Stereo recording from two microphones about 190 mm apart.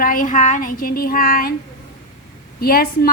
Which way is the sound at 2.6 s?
55° left (ahead or behind).